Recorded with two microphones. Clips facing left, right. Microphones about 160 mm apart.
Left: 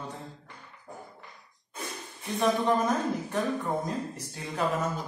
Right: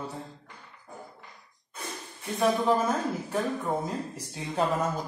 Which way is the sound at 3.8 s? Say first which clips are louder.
Even; 10° right (ahead or behind).